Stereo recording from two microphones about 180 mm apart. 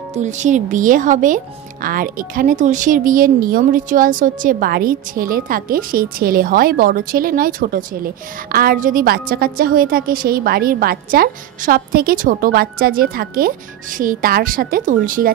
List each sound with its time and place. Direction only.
0.1 s speech: 40° right (ahead or behind)